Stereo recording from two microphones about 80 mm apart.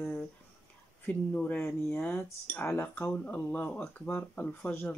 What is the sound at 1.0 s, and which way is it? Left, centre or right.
Speech, centre.